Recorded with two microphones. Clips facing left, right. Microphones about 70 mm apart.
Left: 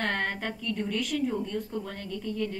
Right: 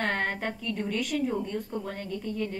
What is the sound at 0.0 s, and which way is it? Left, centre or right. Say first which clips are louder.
A woman's voice: right 1 dB; centre.